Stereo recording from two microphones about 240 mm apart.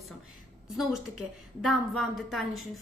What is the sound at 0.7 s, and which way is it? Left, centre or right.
A woman's voice, centre.